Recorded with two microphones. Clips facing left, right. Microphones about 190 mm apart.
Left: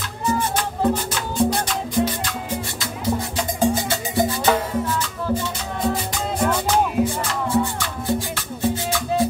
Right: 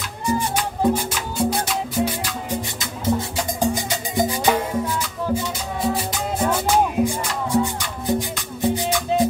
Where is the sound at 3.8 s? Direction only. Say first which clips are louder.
Left 1 dB; 15° right (ahead or behind).